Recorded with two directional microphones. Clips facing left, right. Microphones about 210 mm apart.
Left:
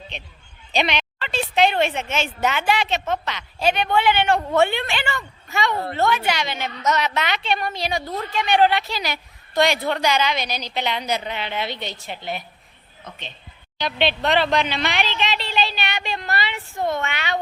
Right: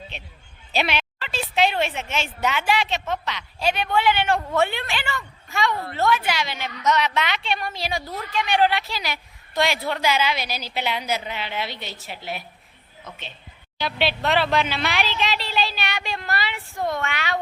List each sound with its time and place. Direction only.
0.7 s a woman's voice: 5° right (ahead or behind)
5.7 s a woman's voice: 35° left (ahead or behind)
6.0 s a woman's voice: centre (ahead or behind)
6.8 s a woman's voice: 40° left (ahead or behind)
7.4 s a woman's voice: centre (ahead or behind)
13.7 s a woman's voice: 5° right (ahead or behind)
16.7 s speech: 25° left (ahead or behind)
17.0 s a woman's voice: centre (ahead or behind)